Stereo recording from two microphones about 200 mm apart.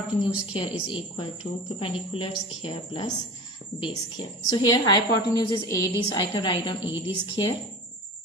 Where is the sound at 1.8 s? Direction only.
25° left (ahead or behind).